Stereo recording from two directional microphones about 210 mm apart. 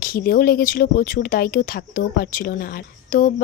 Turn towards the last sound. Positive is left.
turn(degrees=45)  # may be behind; listen again after turning